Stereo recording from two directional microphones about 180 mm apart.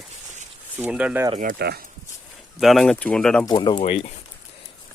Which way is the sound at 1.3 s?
50° right (ahead or behind).